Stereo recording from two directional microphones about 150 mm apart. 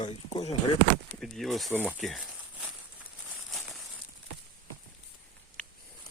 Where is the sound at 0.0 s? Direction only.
40° left (ahead or behind).